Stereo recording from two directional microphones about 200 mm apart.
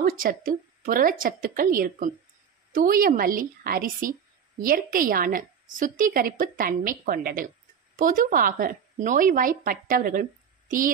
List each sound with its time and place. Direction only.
0.0 s a woman's voice: 45° right (ahead or behind)